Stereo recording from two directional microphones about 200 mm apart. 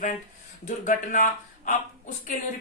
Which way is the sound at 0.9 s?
40° left (ahead or behind).